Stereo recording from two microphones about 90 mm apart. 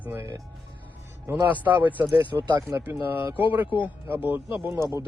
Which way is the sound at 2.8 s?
25° right (ahead or behind).